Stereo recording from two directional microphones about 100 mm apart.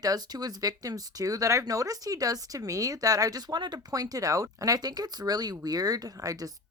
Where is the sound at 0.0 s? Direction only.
40° right (ahead or behind).